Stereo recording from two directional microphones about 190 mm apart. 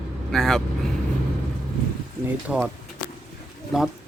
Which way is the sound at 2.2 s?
10° right (ahead or behind).